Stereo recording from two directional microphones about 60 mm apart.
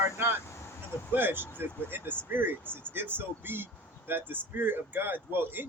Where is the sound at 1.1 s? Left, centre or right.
Right.